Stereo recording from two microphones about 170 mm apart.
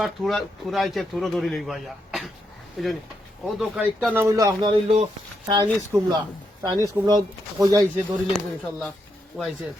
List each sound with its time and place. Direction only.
0.0 s speech: centre (ahead or behind); by 5.0 s 35° right (ahead or behind)
5.6 s speech: 15° right (ahead or behind)
8.1 s speech: centre (ahead or behind)
9.3 s speech: 10° right (ahead or behind)